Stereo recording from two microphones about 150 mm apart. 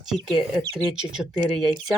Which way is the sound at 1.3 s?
25° right (ahead or behind).